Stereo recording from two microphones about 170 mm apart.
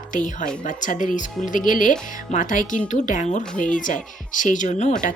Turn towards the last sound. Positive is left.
turn(degrees=45)  # may be behind; listen again after turning